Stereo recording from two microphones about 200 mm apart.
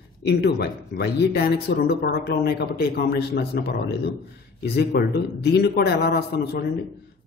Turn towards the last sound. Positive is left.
turn(degrees=50)  # may be behind; listen again after turning